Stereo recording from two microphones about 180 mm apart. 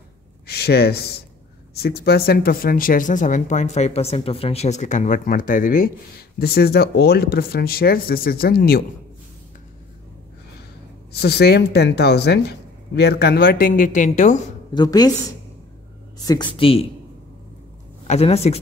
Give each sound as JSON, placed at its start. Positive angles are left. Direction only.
{"t": 0.5, "sound": "speech", "side_deg": 60}
{"t": 11.1, "sound": "speech", "side_deg": 65}
{"t": 14.7, "sound": "speech", "side_deg": 25}
{"t": 16.3, "sound": "speech", "side_deg": 25}
{"t": 18.0, "sound": "speech", "side_deg": 35}